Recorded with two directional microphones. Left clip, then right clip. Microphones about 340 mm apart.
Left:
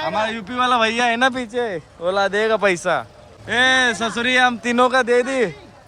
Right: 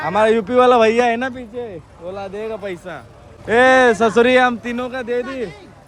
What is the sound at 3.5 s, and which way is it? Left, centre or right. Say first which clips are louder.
A man's voice: right 5 dB; centre.